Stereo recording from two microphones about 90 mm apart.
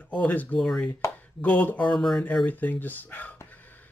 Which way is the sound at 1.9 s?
5° left (ahead or behind).